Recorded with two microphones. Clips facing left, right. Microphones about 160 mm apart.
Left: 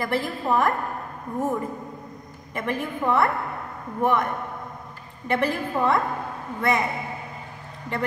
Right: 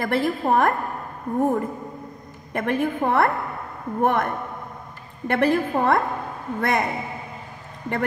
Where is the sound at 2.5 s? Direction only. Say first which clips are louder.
Right 5 dB; 60° right (ahead or behind).